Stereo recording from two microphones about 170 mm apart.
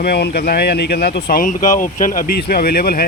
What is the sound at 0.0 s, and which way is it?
Speech, 70° left (ahead or behind).